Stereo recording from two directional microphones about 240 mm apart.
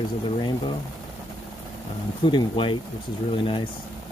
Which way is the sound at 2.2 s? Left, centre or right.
Centre.